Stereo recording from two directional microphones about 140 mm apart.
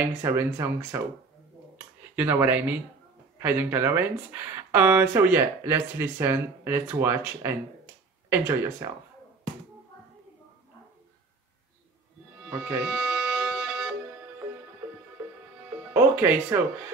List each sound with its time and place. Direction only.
0.2 s speech: 15° right (ahead or behind)
2.1 s speech: 15° right (ahead or behind)
12.4 s music: 15° right (ahead or behind)
15.9 s speech: 15° right (ahead or behind)